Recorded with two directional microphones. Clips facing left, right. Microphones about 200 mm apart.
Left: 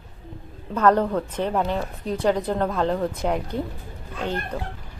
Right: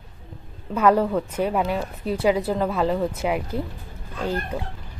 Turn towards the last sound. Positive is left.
turn(degrees=-10)  # may be behind; listen again after turning